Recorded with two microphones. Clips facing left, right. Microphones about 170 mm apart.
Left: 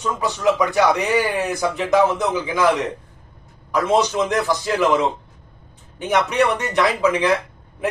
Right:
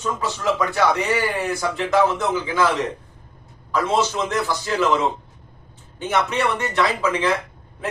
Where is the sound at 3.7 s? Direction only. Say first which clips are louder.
Left 3 dB; 15° left (ahead or behind).